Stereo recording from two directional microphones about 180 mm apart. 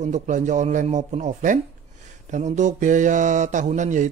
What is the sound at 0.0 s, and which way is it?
Speech, 45° right (ahead or behind).